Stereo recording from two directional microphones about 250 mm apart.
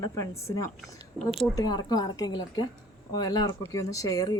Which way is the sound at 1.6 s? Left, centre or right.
Centre.